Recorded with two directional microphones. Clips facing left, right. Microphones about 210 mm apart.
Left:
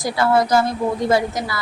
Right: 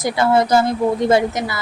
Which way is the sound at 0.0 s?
25° right (ahead or behind).